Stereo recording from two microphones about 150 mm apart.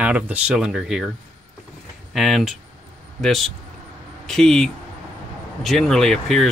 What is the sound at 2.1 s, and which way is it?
Speech, centre (ahead or behind).